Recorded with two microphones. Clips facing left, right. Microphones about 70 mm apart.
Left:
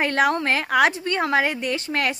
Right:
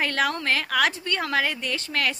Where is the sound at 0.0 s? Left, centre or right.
Left.